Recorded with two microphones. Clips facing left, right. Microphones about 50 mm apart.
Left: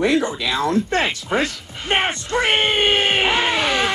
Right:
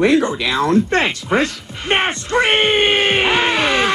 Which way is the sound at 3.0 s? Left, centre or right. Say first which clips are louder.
Right 3 dB; right.